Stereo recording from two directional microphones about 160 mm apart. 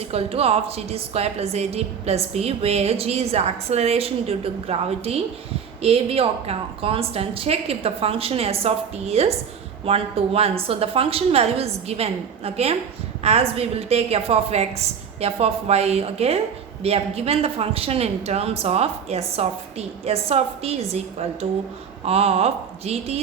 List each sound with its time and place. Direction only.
0.1 s a woman's voice: 40° right (ahead or behind)
22.0 s a woman's voice: 40° right (ahead or behind)